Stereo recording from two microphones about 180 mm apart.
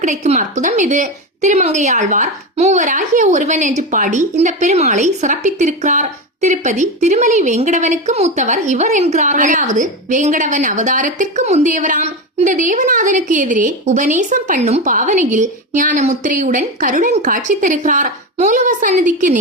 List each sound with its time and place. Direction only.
0.0 s a woman's voice: 40° right (ahead or behind)